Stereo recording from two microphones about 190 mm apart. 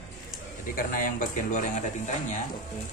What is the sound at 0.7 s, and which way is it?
A man's voice, 45° left (ahead or behind).